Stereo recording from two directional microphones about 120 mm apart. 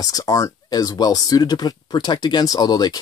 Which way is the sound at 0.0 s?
30° left (ahead or behind).